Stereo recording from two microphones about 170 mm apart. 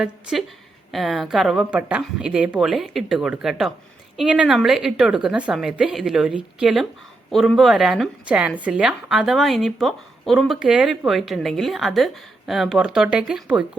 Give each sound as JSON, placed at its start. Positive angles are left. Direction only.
{"t": 0.0, "sound": "speech", "side_deg": -5}